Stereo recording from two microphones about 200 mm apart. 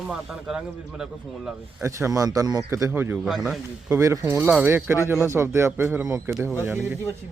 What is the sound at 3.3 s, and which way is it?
Speech, centre (ahead or behind).